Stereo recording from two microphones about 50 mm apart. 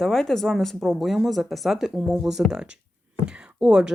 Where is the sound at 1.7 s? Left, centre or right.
Centre.